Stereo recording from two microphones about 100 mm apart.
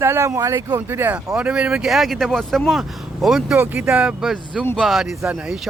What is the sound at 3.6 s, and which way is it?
Speech, 15° right (ahead or behind).